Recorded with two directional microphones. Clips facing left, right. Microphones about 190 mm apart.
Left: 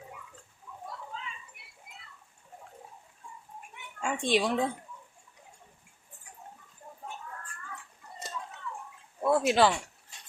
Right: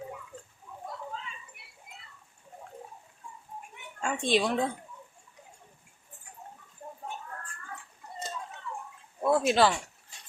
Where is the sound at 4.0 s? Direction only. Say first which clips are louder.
Right 1 dB; 10° left (ahead or behind).